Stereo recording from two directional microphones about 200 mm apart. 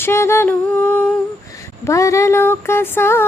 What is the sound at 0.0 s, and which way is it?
Child singing, 15° left (ahead or behind).